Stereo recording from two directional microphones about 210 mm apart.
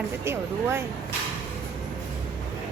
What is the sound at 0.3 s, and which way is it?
Speech, 10° right (ahead or behind).